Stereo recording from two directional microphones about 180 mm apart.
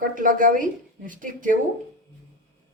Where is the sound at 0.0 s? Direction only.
50° right (ahead or behind).